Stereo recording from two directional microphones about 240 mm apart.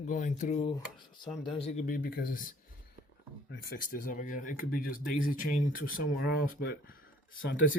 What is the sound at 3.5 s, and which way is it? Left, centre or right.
Speech, left.